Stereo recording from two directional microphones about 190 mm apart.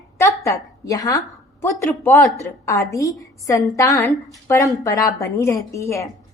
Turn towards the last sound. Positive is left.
turn(degrees=15)  # may be behind; listen again after turning